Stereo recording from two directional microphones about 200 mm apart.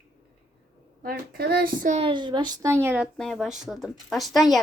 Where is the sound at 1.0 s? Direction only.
50° right (ahead or behind).